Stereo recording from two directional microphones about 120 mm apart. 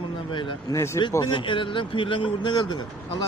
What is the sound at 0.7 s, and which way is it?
Speech, 25° left (ahead or behind).